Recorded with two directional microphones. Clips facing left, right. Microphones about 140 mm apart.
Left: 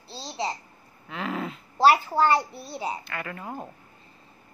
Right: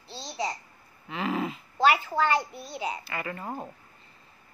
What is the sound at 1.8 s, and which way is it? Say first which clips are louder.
A child's voice: left 4 dB; 35° left (ahead or behind).